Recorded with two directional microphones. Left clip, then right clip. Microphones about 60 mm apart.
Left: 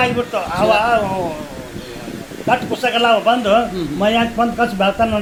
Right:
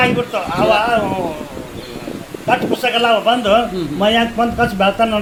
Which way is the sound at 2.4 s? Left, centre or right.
Centre.